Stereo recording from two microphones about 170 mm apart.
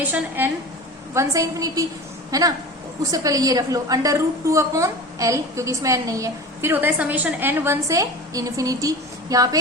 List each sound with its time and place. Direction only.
0.1 s a woman's voice: 10° right (ahead or behind)